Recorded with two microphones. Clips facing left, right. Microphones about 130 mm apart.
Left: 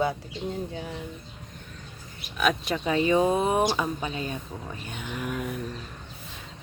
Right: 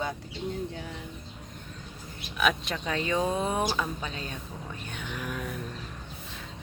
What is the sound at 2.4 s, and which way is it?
Speech, centre (ahead or behind).